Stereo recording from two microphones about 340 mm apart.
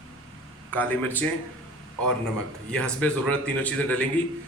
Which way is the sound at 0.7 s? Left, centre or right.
Centre.